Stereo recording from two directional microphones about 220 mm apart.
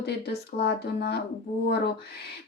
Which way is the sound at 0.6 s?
45° left (ahead or behind).